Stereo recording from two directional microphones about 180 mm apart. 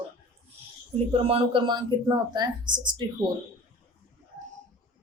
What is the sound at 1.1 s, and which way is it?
Speech, 30° right (ahead or behind).